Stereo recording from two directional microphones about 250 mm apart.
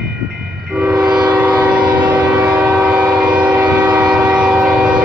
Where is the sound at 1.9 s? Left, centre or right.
Centre.